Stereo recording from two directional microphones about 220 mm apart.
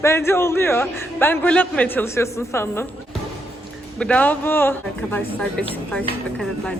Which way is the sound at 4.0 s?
5° left (ahead or behind).